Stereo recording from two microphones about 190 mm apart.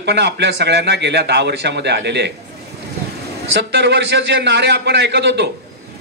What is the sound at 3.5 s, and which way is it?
A man's voice, 65° right (ahead or behind).